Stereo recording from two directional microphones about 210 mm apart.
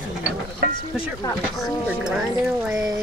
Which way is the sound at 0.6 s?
50° right (ahead or behind).